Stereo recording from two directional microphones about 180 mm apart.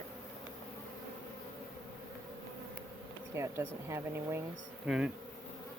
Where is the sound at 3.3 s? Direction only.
15° right (ahead or behind).